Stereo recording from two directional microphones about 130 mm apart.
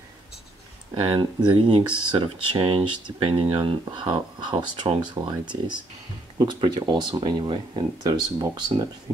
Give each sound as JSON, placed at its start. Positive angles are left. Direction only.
{"t": 1.1, "sound": "speech", "side_deg": -40}
{"t": 6.3, "sound": "speech", "side_deg": -35}